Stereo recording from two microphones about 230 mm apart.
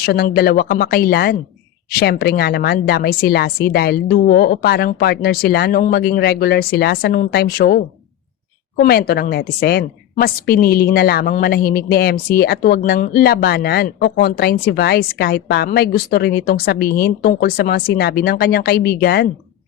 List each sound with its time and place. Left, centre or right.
0.0 s a woman's voice: left